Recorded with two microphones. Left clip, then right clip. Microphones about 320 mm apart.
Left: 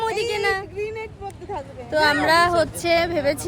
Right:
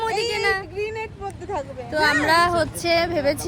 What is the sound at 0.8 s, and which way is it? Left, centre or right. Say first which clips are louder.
Vehicle: right 1 dB; right.